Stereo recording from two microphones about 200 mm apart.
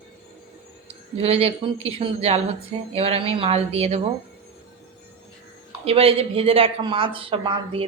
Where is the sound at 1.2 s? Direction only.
30° right (ahead or behind).